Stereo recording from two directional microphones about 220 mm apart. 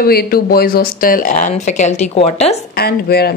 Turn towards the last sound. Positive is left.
turn(degrees=45)  # may be behind; listen again after turning